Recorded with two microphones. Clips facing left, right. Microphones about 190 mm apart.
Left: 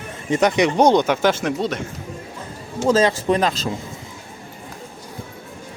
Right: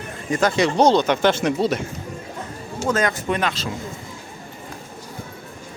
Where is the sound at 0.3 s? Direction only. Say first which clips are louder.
Left 2 dB; 20° left (ahead or behind); by 1.8 s 5° right (ahead or behind).